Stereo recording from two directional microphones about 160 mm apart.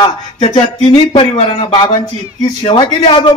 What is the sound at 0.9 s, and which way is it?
Speech, 30° left (ahead or behind).